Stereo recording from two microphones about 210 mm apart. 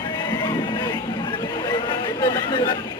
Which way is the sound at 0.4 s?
20° left (ahead or behind).